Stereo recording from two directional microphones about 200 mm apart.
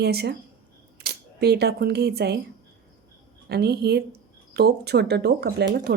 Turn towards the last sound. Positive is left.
turn(degrees=-55)  # may be behind; listen again after turning